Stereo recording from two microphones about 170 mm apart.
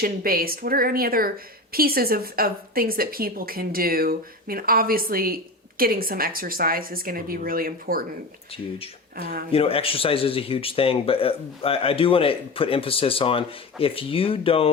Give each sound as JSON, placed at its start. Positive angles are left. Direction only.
{"t": 0.0, "sound": "a woman's voice", "side_deg": -60}
{"t": 9.1, "sound": "a woman's voice", "side_deg": -60}
{"t": 9.5, "sound": "speech", "side_deg": 35}